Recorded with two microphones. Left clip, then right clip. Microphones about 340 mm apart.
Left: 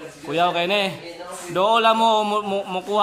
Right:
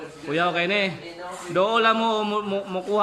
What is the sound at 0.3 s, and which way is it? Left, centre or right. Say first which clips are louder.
Speech: left 3 dB; centre.